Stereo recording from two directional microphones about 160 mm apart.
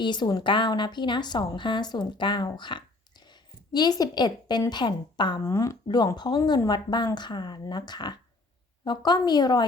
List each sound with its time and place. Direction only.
0.0 s a woman's voice: 30° left (ahead or behind)